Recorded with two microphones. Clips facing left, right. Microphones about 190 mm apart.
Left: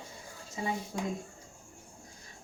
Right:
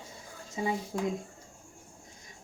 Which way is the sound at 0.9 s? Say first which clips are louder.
Right 6 dB; 15° right (ahead or behind).